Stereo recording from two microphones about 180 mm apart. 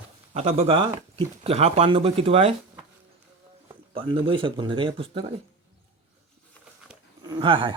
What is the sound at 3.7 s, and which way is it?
Speech, 30° right (ahead or behind).